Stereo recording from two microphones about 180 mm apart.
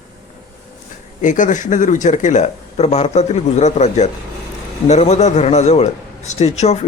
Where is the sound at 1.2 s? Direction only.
45° left (ahead or behind).